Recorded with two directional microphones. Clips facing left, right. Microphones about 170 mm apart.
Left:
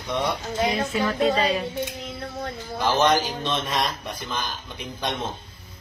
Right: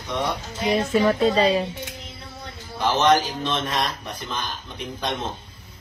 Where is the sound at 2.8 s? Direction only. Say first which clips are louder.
Right 2 dB; centre (ahead or behind).